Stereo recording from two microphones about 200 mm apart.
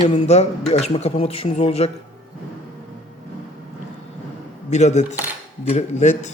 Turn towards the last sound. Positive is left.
turn(degrees=35)  # may be behind; listen again after turning